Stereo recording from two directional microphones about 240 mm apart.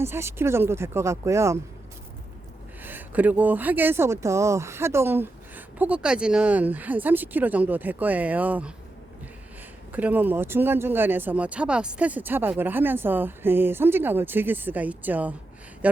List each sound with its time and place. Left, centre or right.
0.0 s speech: centre
2.8 s speech: centre
9.9 s speech: centre